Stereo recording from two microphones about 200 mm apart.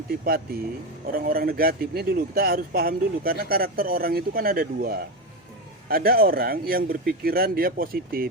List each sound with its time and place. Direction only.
0.1 s a man's voice: 50° right (ahead or behind)